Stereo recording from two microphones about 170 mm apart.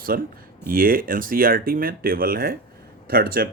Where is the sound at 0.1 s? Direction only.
60° right (ahead or behind).